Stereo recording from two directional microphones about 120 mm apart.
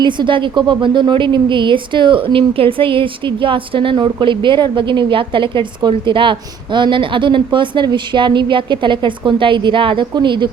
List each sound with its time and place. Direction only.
0.0 s a woman's voice: 40° right (ahead or behind)